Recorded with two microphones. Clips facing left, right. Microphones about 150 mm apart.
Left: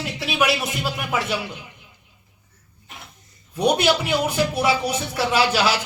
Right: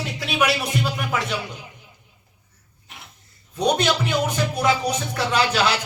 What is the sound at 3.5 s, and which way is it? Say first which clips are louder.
Speech: left 2 dB; 10° left (ahead or behind).